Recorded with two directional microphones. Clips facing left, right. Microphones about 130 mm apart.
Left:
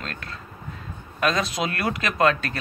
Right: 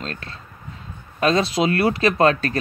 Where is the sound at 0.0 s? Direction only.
30° right (ahead or behind).